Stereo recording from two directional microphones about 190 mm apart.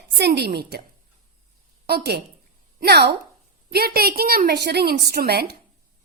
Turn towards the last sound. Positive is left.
turn(degrees=-55)  # may be behind; listen again after turning